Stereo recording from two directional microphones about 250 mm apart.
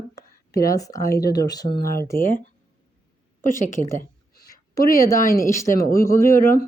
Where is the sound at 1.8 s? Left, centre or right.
Left.